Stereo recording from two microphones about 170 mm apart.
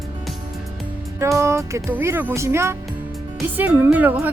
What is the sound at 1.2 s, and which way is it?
Speech, 15° right (ahead or behind).